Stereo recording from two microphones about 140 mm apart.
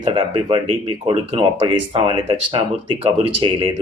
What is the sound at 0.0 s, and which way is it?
Speech, 35° right (ahead or behind).